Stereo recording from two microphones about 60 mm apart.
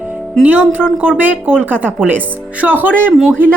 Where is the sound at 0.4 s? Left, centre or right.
Right.